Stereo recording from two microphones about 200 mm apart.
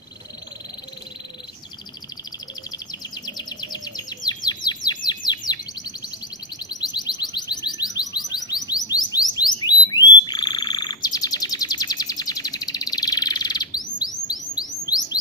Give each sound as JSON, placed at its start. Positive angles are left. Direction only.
{"t": 2.9, "sound": "chirp", "side_deg": 20}
{"t": 6.7, "sound": "music", "side_deg": 20}
{"t": 9.6, "sound": "frog", "side_deg": 20}
{"t": 14.3, "sound": "chirp", "side_deg": 20}